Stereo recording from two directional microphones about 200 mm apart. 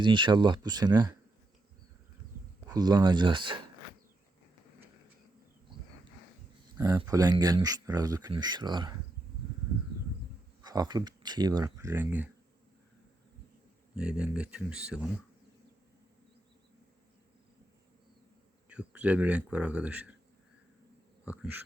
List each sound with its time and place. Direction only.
0.0 s speech: 25° right (ahead or behind)
2.6 s speech: 20° right (ahead or behind)
6.7 s speech: 20° right (ahead or behind)
10.6 s speech: 20° right (ahead or behind)
13.9 s speech: 5° right (ahead or behind)
18.7 s speech: 5° right (ahead or behind)
21.2 s insect: 10° right (ahead or behind)